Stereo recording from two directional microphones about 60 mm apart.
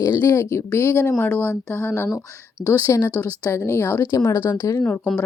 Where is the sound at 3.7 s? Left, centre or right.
Left.